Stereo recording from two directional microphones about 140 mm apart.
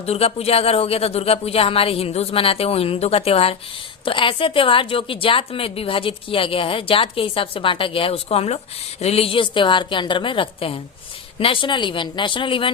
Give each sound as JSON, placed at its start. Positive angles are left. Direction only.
{"t": 0.0, "sound": "a woman's voice", "side_deg": 45}